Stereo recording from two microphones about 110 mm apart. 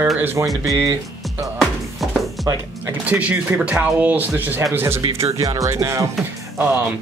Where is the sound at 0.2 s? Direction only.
20° right (ahead or behind).